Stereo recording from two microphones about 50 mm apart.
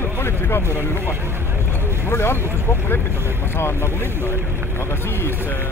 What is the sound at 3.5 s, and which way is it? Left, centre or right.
Speech, left.